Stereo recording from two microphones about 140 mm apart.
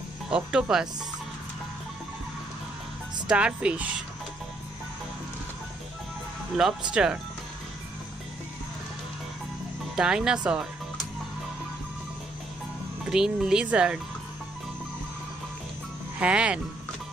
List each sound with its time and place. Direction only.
0.3 s speech: 5° right (ahead or behind)
3.3 s speech: 10° right (ahead or behind)
6.9 s speech: 5° right (ahead or behind)
9.9 s speech: 5° right (ahead or behind)
13.0 s speech: 5° right (ahead or behind)
16.2 s speech: 10° right (ahead or behind)